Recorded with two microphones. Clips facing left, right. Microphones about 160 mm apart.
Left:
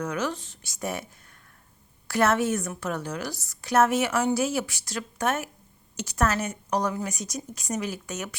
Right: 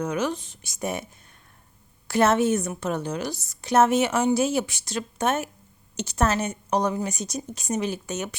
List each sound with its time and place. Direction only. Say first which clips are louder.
0.0 s a woman's voice: right 3 dB; 20° right (ahead or behind)
2.0 s a woman's voice: right 3 dB; 25° right (ahead or behind)